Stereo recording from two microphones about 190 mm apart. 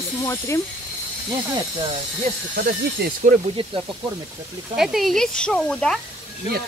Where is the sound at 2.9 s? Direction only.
45° right (ahead or behind).